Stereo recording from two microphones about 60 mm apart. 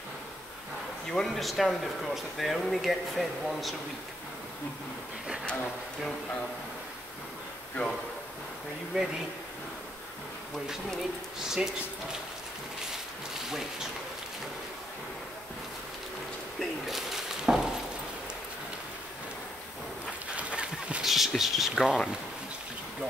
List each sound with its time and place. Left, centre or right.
1.1 s speech: centre
8.9 s speech: centre
11.3 s speech: centre
16.5 s a sound: centre
20.3 s a sound: centre
21.0 s speech: centre